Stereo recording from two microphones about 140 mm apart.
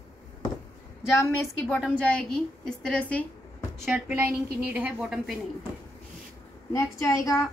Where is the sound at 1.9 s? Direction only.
5° left (ahead or behind).